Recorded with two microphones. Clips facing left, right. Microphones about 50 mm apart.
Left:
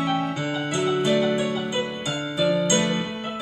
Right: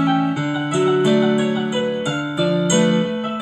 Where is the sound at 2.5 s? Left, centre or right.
Centre.